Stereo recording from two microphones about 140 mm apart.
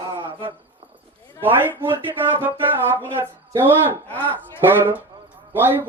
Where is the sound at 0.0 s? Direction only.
20° right (ahead or behind).